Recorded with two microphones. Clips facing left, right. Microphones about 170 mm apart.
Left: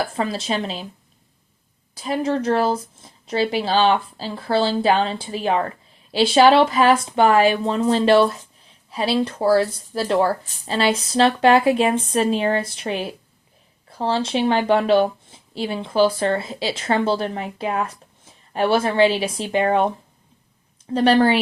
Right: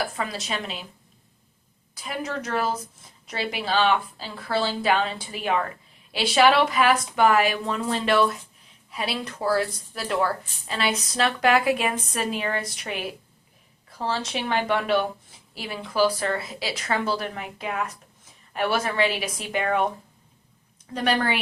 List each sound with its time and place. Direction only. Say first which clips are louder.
0.0 s speech: left 5 dB; 30° left (ahead or behind)
2.0 s speech: left 9 dB; 30° left (ahead or behind)
20.9 s a woman's voice: left 9 dB; 30° left (ahead or behind)